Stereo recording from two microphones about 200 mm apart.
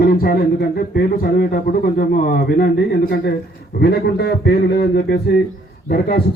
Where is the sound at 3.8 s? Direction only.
55° left (ahead or behind).